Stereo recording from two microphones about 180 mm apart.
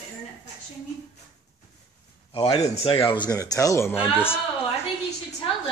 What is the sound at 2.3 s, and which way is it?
Speech, 30° left (ahead or behind).